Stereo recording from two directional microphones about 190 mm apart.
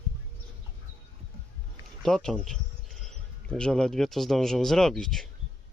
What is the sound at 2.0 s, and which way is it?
Speech, 5° left (ahead or behind).